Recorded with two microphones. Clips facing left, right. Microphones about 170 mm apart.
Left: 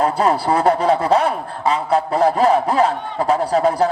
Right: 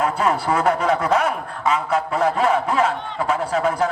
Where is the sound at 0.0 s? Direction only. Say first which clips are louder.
Left 3 dB; 35° left (ahead or behind).